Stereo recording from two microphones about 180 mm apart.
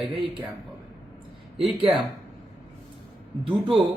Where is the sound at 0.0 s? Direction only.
Centre (ahead or behind).